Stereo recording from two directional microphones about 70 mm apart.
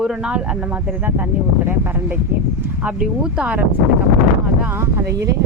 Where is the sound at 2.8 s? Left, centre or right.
Centre.